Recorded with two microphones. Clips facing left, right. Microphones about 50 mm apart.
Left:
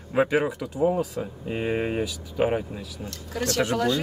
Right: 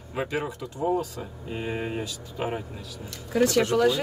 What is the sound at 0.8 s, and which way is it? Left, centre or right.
Speech, centre.